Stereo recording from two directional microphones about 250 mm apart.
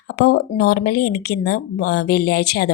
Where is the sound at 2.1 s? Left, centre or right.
Left.